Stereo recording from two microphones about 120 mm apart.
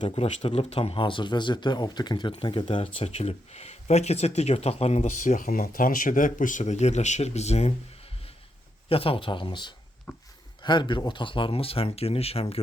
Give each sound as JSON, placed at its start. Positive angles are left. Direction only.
{"t": 0.0, "sound": "a man's voice", "side_deg": 65}
{"t": 8.9, "sound": "a man's voice", "side_deg": 50}
{"t": 10.1, "sound": "speech", "side_deg": 15}
{"t": 10.6, "sound": "a man's voice", "side_deg": 40}